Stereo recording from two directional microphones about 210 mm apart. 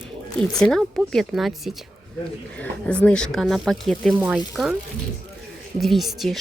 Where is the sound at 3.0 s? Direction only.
5° left (ahead or behind).